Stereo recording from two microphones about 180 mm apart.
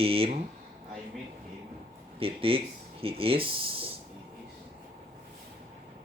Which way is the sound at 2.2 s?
30° right (ahead or behind).